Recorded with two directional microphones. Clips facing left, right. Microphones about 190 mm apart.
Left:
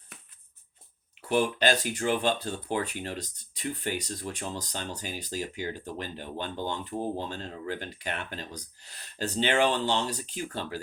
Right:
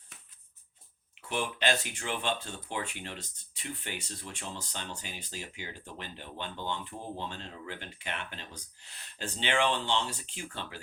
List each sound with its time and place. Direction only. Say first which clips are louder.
1.3 s speech: left 6 dB; 40° left (ahead or behind)